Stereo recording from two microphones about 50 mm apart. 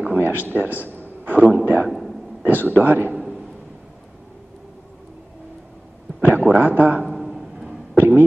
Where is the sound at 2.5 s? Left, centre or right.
Right.